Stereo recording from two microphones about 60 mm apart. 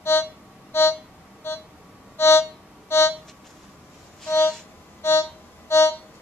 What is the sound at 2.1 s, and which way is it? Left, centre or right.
Music, left.